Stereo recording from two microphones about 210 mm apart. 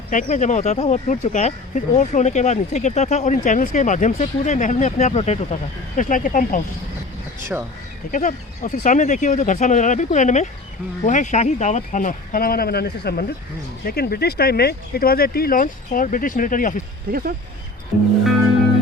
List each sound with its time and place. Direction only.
0.1 s speech: 35° left (ahead or behind)
8.1 s speech: 35° left (ahead or behind)
17.1 s speech: 45° right (ahead or behind)